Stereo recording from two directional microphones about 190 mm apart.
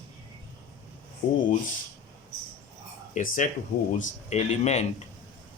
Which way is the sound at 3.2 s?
40° left (ahead or behind).